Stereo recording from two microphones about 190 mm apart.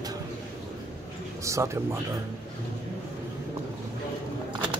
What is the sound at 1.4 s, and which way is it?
Speech, 15° right (ahead or behind).